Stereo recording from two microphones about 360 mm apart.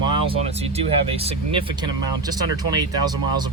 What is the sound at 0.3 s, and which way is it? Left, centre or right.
Speech, centre.